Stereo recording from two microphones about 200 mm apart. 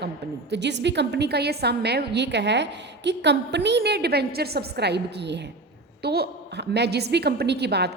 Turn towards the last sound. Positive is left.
turn(degrees=-55)  # may be behind; listen again after turning